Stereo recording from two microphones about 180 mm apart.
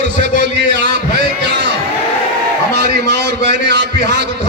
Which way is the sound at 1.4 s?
75° right (ahead or behind).